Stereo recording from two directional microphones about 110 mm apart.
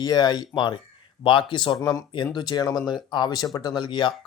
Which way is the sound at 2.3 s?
40° left (ahead or behind).